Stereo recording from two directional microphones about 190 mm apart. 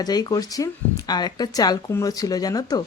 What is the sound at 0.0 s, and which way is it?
Speech, 20° left (ahead or behind).